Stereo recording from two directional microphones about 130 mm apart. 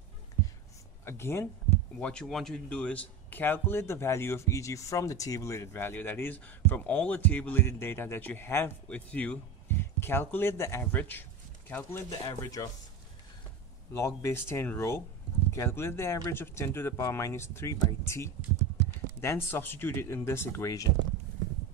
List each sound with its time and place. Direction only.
1.0 s speech: 20° left (ahead or behind)
13.9 s speech: 20° left (ahead or behind)